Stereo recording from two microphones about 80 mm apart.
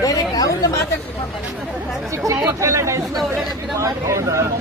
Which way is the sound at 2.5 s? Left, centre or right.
Right.